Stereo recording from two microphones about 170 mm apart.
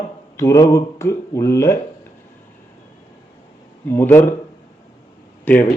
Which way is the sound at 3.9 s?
10° left (ahead or behind).